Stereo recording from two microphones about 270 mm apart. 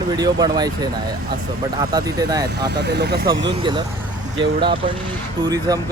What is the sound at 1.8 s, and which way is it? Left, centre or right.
Speech, centre.